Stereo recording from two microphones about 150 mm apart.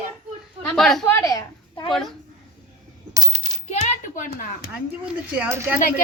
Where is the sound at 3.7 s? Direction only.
55° left (ahead or behind).